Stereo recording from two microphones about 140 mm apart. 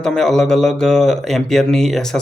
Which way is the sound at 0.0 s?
5° left (ahead or behind).